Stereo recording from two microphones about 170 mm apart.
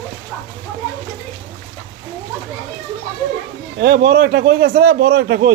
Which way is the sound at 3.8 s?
65° right (ahead or behind).